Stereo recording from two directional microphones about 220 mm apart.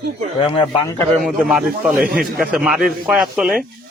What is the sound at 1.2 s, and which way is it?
A man's voice, centre (ahead or behind).